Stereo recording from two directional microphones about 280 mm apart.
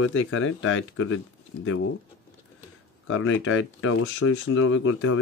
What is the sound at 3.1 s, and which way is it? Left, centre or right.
A man's voice, left.